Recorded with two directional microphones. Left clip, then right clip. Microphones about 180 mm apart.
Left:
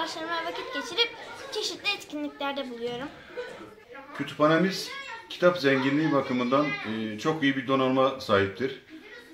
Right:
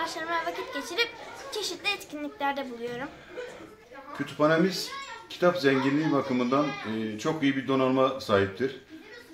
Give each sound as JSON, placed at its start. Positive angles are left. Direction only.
{"t": 0.0, "sound": "speech", "side_deg": -10}
{"t": 4.4, "sound": "speech", "side_deg": -10}